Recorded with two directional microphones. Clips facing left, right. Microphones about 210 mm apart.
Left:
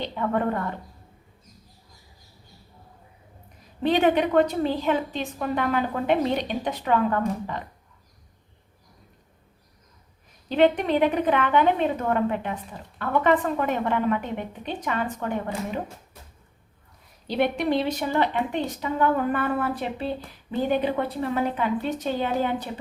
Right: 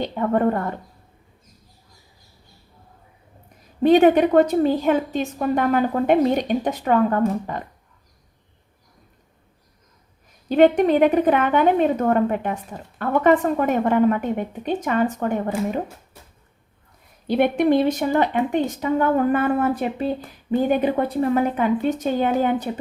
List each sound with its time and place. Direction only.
0.0 s speech: 45° right (ahead or behind)
3.8 s speech: 45° right (ahead or behind)
10.5 s speech: 45° right (ahead or behind)
17.2 s speech: 55° right (ahead or behind)